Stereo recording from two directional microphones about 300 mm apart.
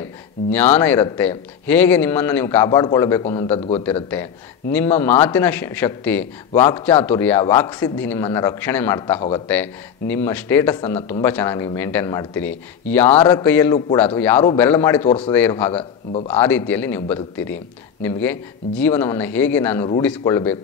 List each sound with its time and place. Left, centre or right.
0.5 s a man's voice: centre
3.8 s a man's voice: centre
15.8 s speech: centre
16.3 s a man's voice: centre